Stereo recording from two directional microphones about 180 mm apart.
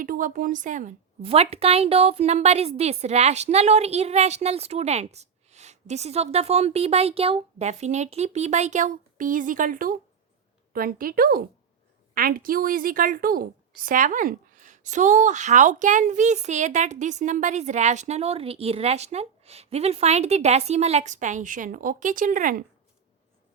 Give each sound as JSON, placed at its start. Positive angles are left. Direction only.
{"t": 0.0, "sound": "a woman's voice", "side_deg": -50}
{"t": 1.2, "sound": "a woman's voice", "side_deg": -35}